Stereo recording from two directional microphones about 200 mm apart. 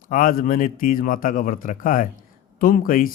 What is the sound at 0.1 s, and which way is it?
A man's voice, 45° left (ahead or behind).